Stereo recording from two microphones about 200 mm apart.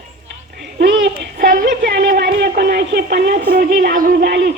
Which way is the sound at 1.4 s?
55° right (ahead or behind).